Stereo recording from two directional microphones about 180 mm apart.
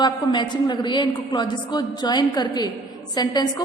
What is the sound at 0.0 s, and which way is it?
A woman's voice, 25° left (ahead or behind).